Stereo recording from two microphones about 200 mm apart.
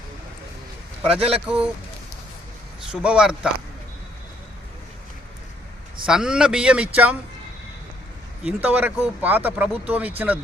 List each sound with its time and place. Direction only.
1.0 s a man's voice: 30° right (ahead or behind)
1.5 s speech: 5° right (ahead or behind)
2.9 s speech: 5° right (ahead or behind)
6.1 s speech: 5° right (ahead or behind)
8.4 s speech: 10° right (ahead or behind)